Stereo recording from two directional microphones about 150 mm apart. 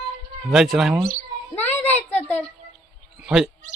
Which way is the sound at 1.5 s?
15° left (ahead or behind).